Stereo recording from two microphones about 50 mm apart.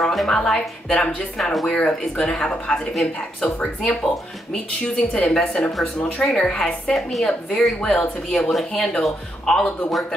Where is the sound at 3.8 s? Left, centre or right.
Centre.